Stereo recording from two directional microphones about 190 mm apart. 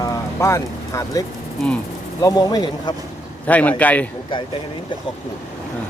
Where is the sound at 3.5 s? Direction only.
10° left (ahead or behind).